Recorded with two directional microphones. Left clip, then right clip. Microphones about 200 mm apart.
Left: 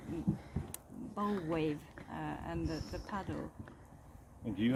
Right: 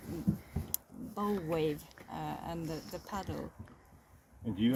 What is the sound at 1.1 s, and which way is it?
Speech, 5° right (ahead or behind).